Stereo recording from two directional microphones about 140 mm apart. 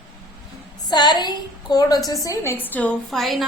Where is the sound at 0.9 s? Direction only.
30° left (ahead or behind).